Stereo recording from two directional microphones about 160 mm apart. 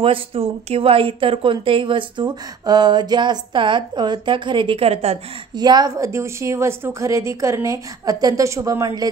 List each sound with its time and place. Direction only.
0.0 s speech: 35° right (ahead or behind)
5.6 s a woman's voice: 25° right (ahead or behind)